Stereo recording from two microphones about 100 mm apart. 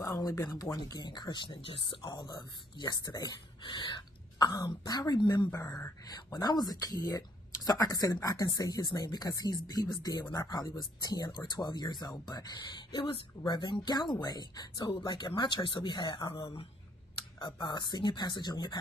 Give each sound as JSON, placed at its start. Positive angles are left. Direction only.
{"t": 0.0, "sound": "speech", "side_deg": 25}
{"t": 2.0, "sound": "speech", "side_deg": 40}
{"t": 17.4, "sound": "speech", "side_deg": 50}